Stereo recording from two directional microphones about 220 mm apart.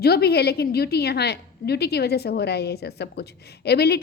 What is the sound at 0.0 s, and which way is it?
A woman's voice, 45° left (ahead or behind).